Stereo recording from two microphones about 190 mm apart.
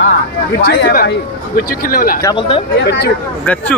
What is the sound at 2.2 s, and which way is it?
Speech, 25° left (ahead or behind).